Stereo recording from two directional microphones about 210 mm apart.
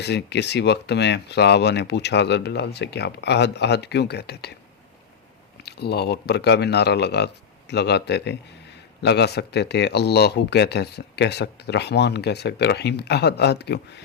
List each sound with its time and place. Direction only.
0.0 s speech: 50° left (ahead or behind)
5.6 s speech: 50° left (ahead or behind)